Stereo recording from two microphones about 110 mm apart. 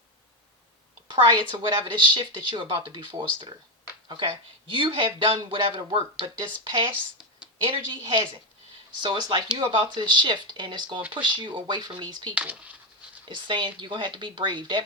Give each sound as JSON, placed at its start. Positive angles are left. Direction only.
{"t": 1.0, "sound": "speech", "side_deg": -50}
{"t": 12.3, "sound": "speech", "side_deg": -10}
{"t": 13.2, "sound": "speech", "side_deg": -45}